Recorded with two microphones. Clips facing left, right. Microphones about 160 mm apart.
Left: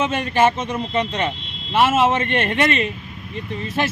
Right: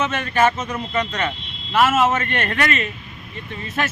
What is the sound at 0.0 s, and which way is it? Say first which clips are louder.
Speech: left 1 dB; 30° left (ahead or behind).